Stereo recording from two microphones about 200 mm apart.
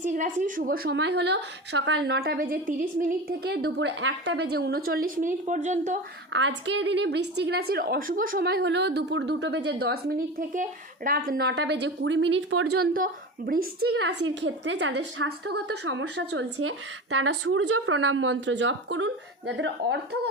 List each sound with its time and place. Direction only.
0.0 s a woman's voice: 40° right (ahead or behind)
6.3 s a woman's voice: 65° right (ahead or behind); by 12.8 s 90° right
12.8 s a woman's voice: 50° right (ahead or behind); by 20.0 s 65° right (ahead or behind)